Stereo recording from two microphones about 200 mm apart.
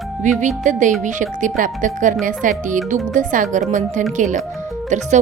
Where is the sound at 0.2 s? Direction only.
40° right (ahead or behind).